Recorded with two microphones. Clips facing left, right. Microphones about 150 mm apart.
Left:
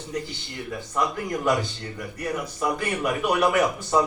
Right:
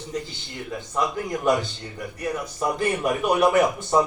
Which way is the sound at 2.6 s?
20° right (ahead or behind).